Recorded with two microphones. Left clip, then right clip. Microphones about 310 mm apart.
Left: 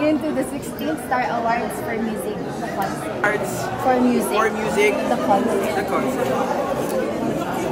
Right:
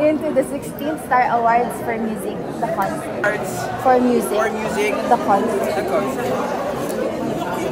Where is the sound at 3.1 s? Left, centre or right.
Centre.